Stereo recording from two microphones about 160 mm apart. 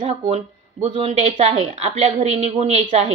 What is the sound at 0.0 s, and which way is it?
Speech, 40° right (ahead or behind).